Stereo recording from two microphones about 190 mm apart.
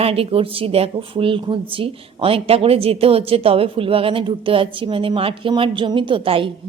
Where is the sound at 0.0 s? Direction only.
30° right (ahead or behind).